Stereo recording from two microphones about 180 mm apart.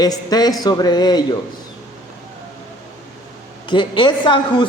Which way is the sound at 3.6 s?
25° left (ahead or behind).